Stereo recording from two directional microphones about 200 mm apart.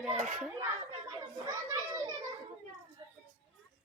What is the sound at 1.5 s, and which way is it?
Children playing, 15° right (ahead or behind).